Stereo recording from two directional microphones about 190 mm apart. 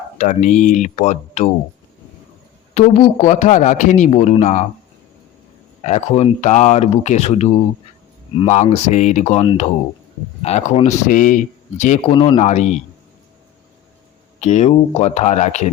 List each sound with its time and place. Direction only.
0.2 s a man's voice: 40° left (ahead or behind)
2.7 s a man's voice: 35° left (ahead or behind)
5.8 s a man's voice: 35° left (ahead or behind)
12.1 s a man's voice: 25° left (ahead or behind)
14.3 s a man's voice: 35° left (ahead or behind)